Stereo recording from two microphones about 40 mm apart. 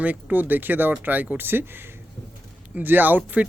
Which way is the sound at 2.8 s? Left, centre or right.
Right.